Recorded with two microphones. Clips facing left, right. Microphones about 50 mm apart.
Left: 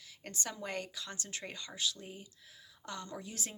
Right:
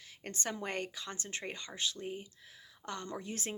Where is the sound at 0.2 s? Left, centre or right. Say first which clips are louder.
Right 3 dB; right.